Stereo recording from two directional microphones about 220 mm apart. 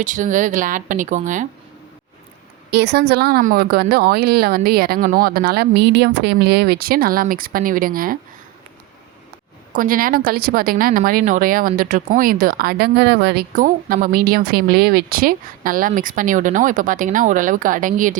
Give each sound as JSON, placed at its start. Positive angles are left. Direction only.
{"t": 0.0, "sound": "a woman's voice", "side_deg": -35}
{"t": 2.7, "sound": "a woman's voice", "side_deg": -50}
{"t": 9.7, "sound": "a woman's voice", "side_deg": -40}